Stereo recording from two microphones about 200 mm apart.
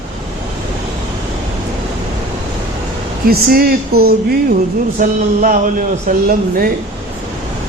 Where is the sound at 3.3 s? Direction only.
50° right (ahead or behind).